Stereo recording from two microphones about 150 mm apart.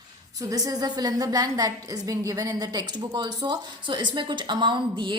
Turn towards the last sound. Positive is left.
turn(degrees=-30)  # may be behind; listen again after turning